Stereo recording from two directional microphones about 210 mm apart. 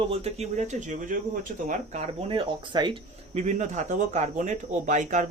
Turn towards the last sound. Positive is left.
turn(degrees=-35)  # may be behind; listen again after turning